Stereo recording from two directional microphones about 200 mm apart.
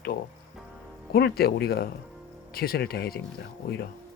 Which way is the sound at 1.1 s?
50° left (ahead or behind).